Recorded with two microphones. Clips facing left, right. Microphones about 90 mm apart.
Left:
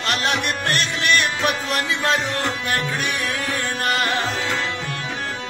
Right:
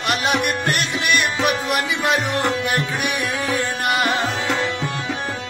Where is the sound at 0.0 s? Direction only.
15° right (ahead or behind).